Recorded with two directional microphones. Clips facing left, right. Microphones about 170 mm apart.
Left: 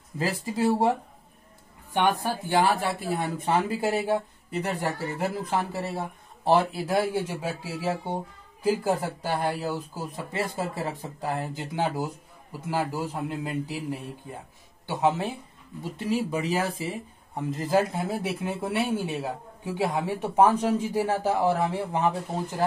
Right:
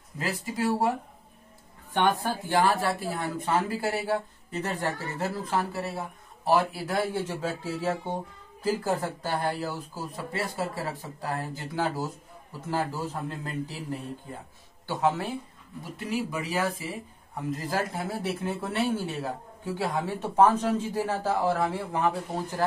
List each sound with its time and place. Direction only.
0.2 s speech: 25° left (ahead or behind)
2.0 s speech: 15° left (ahead or behind)
5.9 s speech: 25° left (ahead or behind)